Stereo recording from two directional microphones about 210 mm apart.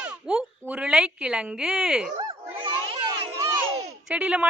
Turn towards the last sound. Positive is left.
turn(degrees=-5)  # may be behind; listen again after turning